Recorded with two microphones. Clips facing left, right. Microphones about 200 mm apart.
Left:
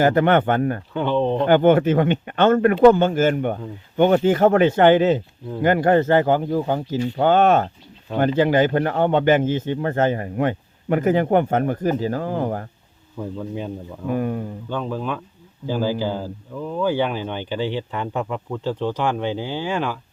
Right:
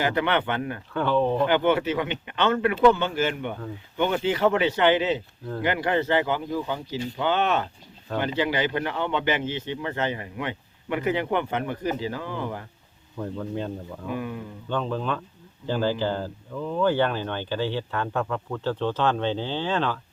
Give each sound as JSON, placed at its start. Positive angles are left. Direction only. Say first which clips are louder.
{"t": 0.0, "sound": "speech", "louder": "left 8 dB", "side_deg": 45}
{"t": 0.9, "sound": "speech", "louder": "left 1 dB", "side_deg": 20}
{"t": 1.5, "sound": "speech", "louder": "left 7 dB", "side_deg": 50}
{"t": 13.1, "sound": "speech", "louder": "left 2 dB", "side_deg": 5}
{"t": 14.1, "sound": "speech", "louder": "left 8 dB", "side_deg": 45}
{"t": 14.7, "sound": "speech", "louder": "even", "side_deg": 10}